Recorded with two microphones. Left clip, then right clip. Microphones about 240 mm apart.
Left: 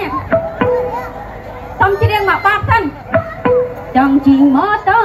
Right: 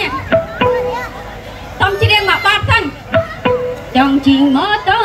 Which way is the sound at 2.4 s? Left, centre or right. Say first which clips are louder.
Even; right.